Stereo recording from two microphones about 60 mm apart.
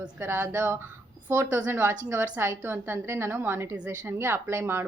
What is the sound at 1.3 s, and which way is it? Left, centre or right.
A woman's voice, right.